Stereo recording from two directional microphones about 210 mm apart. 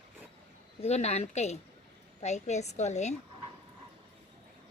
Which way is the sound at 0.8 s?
30° left (ahead or behind).